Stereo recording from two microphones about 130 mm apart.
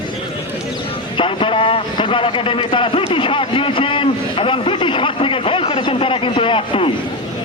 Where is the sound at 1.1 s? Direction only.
40° left (ahead or behind).